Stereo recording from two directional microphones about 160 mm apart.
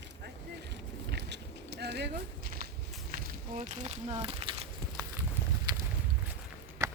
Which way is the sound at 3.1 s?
60° right (ahead or behind).